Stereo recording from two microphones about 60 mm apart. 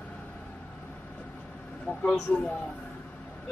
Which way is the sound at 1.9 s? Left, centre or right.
Left.